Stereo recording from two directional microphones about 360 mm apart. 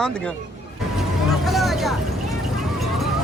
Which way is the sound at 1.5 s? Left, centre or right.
Centre.